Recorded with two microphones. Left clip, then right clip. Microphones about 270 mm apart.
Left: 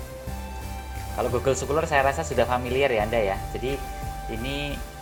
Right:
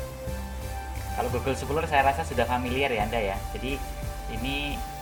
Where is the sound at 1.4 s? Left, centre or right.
Left.